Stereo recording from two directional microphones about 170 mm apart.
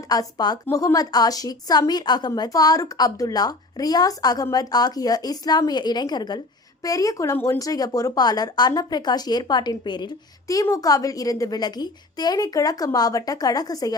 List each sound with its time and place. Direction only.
0.1 s a woman's voice: 25° left (ahead or behind)